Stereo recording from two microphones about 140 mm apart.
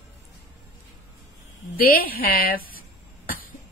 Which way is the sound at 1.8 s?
90° left.